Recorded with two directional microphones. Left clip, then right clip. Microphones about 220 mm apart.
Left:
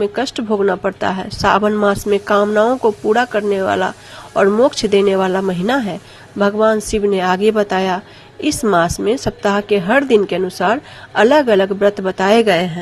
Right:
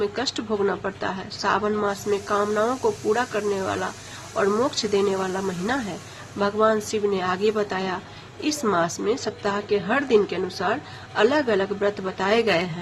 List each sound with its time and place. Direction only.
0.0 s speech: 30° left (ahead or behind)